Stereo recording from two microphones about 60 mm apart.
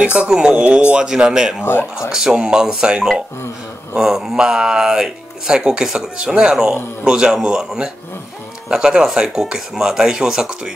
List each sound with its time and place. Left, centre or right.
0.0 s speech: right
1.6 s speech: left
2.0 s speech: centre